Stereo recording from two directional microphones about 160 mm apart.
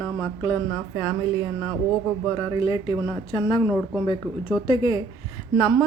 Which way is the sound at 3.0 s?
20° left (ahead or behind).